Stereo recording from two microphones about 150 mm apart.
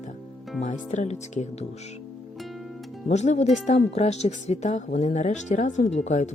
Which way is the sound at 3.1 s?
50° left (ahead or behind).